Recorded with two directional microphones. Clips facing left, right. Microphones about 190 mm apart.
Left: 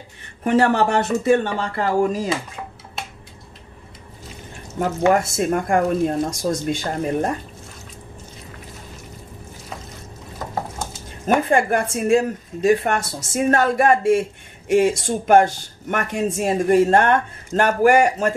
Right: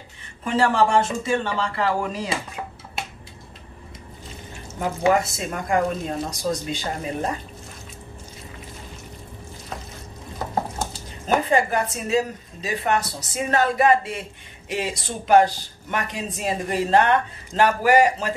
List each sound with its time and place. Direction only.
0.4 s speech: 60° left (ahead or behind)
5.1 s speech: 50° left (ahead or behind)
11.2 s speech: 55° left (ahead or behind)